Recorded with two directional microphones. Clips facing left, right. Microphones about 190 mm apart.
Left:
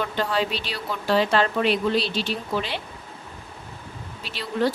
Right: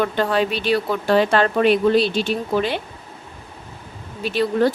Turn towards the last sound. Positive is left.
turn(degrees=-50)  # may be behind; listen again after turning